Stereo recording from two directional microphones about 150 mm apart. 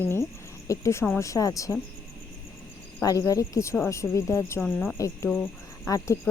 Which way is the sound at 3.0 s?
20° left (ahead or behind).